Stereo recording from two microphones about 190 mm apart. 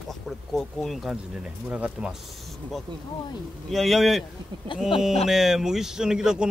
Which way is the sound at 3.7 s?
Centre (ahead or behind).